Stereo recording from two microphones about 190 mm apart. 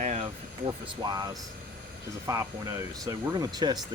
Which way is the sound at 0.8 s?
20° right (ahead or behind).